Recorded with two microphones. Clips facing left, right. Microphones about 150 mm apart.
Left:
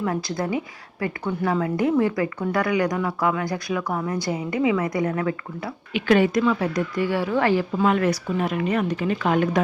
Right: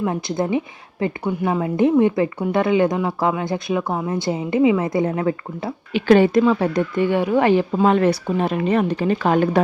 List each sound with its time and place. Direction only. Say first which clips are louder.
0.0 s a woman's voice: right 3 dB; 20° right (ahead or behind)
7.8 s speech: right 4 dB; 30° right (ahead or behind)